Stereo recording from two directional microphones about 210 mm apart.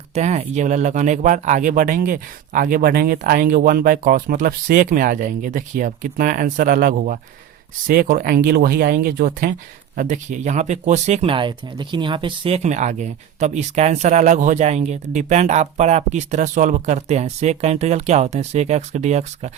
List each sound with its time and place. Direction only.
0.1 s speech: 30° right (ahead or behind)